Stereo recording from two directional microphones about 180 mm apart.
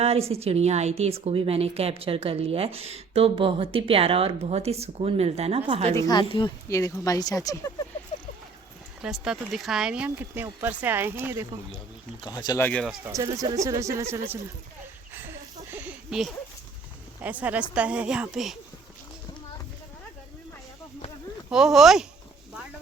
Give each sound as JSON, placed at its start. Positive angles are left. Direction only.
{"t": 0.0, "sound": "a woman's voice", "side_deg": -35}
{"t": 6.1, "sound": "speech", "side_deg": 25}
{"t": 9.0, "sound": "speech", "side_deg": -5}
{"t": 12.2, "sound": "speech", "side_deg": 25}
{"t": 12.6, "sound": "speech", "side_deg": 5}
{"t": 13.1, "sound": "speech", "side_deg": -15}
{"t": 15.7, "sound": "a sound", "side_deg": -10}
{"t": 17.2, "sound": "speech", "side_deg": -10}
{"t": 21.5, "sound": "speech", "side_deg": -5}